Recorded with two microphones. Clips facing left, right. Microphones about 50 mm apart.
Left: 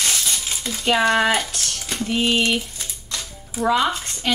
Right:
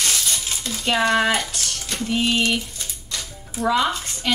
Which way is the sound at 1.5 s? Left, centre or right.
Centre.